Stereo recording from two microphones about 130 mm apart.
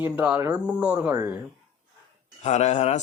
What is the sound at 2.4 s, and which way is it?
Speech, 60° left (ahead or behind).